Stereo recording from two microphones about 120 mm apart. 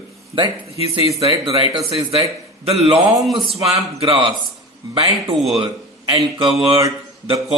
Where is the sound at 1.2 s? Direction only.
55° right (ahead or behind).